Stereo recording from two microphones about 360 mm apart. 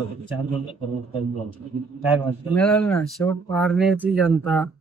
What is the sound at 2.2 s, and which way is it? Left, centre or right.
Speech, centre.